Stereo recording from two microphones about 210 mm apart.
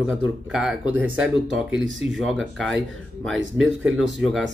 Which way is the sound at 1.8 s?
65° right (ahead or behind).